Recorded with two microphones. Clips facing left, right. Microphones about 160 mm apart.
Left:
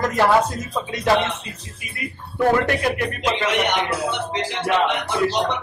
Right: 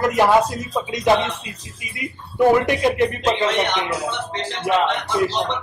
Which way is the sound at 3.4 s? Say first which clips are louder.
Even; 15° left (ahead or behind).